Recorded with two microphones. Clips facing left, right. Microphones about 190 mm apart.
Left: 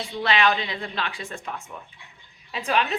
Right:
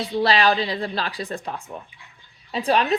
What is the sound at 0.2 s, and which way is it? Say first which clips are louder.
A woman's voice: right 3 dB; 35° right (ahead or behind).